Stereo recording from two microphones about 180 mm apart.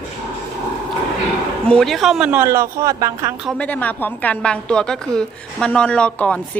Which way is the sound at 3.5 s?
5° left (ahead or behind).